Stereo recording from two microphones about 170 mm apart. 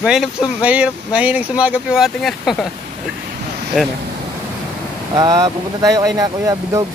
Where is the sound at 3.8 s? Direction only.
Centre (ahead or behind).